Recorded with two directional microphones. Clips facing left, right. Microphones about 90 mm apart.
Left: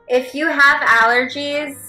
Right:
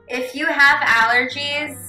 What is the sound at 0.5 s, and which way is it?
A woman's voice, 30° left (ahead or behind).